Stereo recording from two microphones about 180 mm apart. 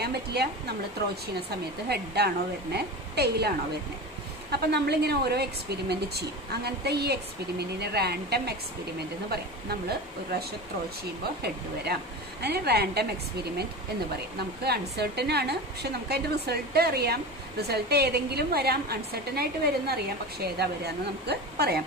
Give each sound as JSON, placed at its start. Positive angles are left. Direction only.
{"t": 0.0, "sound": "a woman's voice", "side_deg": -65}
{"t": 1.9, "sound": "a woman's voice", "side_deg": -65}
{"t": 11.4, "sound": "a woman's voice", "side_deg": -65}